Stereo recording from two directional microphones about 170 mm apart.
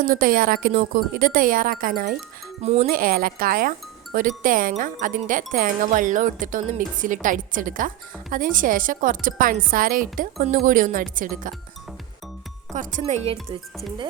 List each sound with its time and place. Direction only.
0.0 s speech: 55° right (ahead or behind)
2.6 s speech: 40° right (ahead or behind)
2.8 s speech: 55° right (ahead or behind)
12.7 s speech: 50° right (ahead or behind)
13.0 s speech: 35° right (ahead or behind)